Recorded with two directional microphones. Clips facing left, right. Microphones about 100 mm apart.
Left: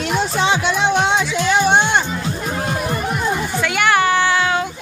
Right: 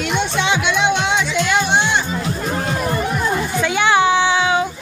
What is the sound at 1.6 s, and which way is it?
Music, 50° left (ahead or behind).